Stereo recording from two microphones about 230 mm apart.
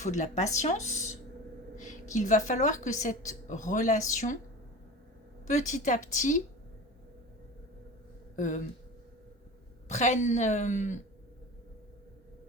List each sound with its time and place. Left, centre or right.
0.0 s a woman's voice: left
5.5 s speech: left
8.4 s speech: left
9.9 s speech: left